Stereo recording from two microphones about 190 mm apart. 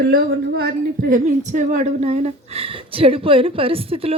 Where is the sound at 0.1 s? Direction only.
55° right (ahead or behind).